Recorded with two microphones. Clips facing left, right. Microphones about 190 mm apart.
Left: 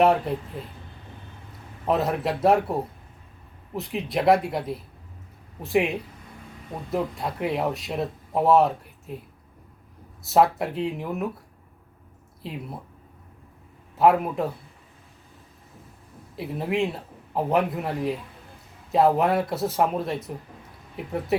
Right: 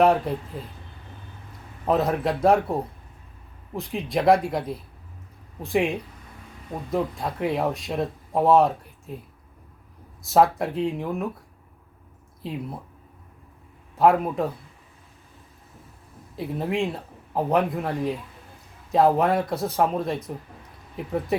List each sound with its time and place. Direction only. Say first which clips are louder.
0.0 s speech: right 1 dB; centre (ahead or behind)
1.8 s speech: right 1 dB; centre (ahead or behind)
3.8 s speech: right 1 dB; 5° left (ahead or behind)
10.2 s speech: right 1 dB; centre (ahead or behind)
13.9 s speech: even; 5° left (ahead or behind)
16.3 s speech: even; 5° left (ahead or behind)